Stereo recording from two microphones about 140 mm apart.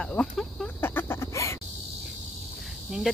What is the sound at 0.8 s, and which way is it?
Chicken, 15° left (ahead or behind).